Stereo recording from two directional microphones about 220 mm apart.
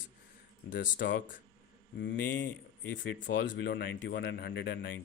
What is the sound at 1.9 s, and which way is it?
Speech, 55° left (ahead or behind).